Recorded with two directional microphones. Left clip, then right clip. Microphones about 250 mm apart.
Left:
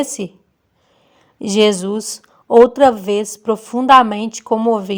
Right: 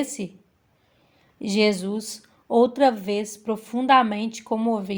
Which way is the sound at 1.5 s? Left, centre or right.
Left.